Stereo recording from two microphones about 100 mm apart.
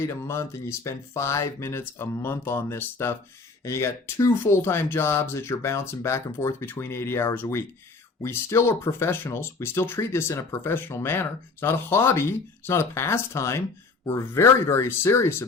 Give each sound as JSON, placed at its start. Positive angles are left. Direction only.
{"t": 0.0, "sound": "speech", "side_deg": 25}